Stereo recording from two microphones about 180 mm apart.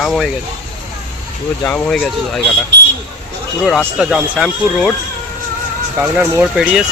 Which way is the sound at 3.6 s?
Centre (ahead or behind).